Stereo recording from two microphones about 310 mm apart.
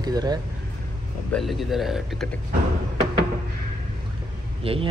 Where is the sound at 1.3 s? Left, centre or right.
Centre.